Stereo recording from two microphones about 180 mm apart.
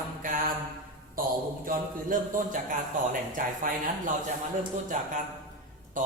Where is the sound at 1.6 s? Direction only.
50° right (ahead or behind).